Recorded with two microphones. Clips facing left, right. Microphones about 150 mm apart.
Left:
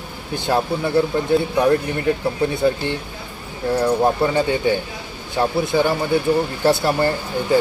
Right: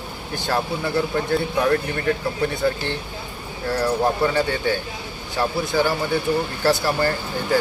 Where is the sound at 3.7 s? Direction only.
20° left (ahead or behind).